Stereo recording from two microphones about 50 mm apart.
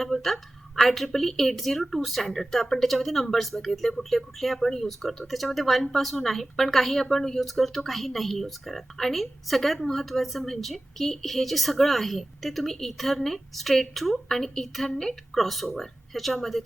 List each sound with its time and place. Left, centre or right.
0.0 s a woman's voice: centre